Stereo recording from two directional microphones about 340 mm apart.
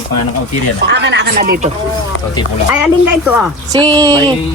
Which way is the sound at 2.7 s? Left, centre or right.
Centre.